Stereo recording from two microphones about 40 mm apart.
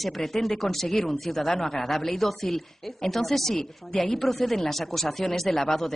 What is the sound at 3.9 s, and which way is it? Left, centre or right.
Speech, left.